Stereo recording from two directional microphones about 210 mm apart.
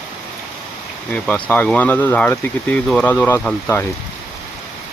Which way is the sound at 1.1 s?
5° left (ahead or behind).